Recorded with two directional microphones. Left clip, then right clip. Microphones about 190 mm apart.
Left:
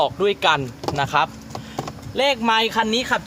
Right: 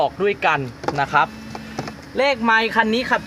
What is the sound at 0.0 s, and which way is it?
Speech, 15° left (ahead or behind).